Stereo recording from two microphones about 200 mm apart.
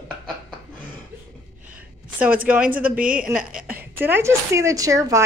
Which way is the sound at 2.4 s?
5° right (ahead or behind).